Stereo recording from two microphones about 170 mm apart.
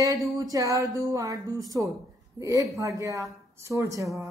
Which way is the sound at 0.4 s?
20° right (ahead or behind).